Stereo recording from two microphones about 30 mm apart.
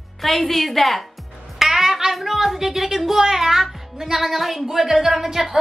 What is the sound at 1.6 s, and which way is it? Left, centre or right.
A woman's voice, centre.